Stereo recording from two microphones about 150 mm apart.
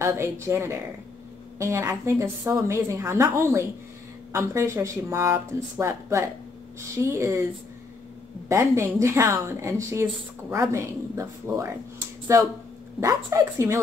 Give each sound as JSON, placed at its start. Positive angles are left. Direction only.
{"t": 0.0, "sound": "a woman's voice", "side_deg": -15}
{"t": 8.5, "sound": "a woman's voice", "side_deg": -20}